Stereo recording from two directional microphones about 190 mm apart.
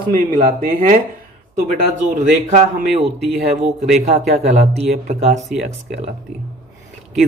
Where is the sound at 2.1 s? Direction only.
40° right (ahead or behind).